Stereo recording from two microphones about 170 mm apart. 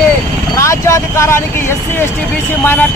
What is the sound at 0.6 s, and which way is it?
Vehicle, 15° left (ahead or behind).